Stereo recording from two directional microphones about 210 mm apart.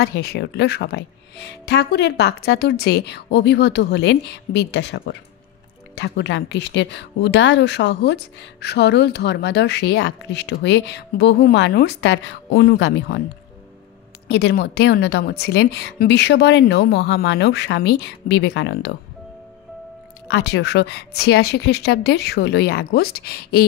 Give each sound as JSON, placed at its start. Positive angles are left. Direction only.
{"t": 0.0, "sound": "speech", "side_deg": 50}
{"t": 14.3, "sound": "speech", "side_deg": 50}
{"t": 20.2, "sound": "speech", "side_deg": 55}